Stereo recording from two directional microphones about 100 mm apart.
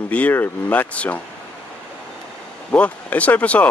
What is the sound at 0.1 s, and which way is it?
Speech, 20° left (ahead or behind).